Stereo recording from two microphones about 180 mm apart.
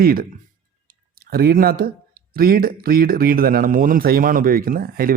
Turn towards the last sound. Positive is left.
turn(degrees=-55)  # may be behind; listen again after turning